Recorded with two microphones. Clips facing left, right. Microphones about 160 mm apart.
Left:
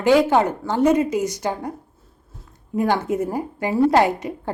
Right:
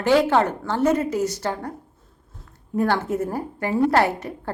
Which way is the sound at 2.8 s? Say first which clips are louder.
Left 1 dB; 15° left (ahead or behind).